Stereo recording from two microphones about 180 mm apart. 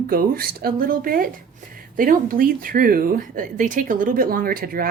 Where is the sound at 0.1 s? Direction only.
55° right (ahead or behind).